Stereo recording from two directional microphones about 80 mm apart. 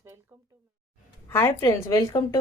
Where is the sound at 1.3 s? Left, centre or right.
Left.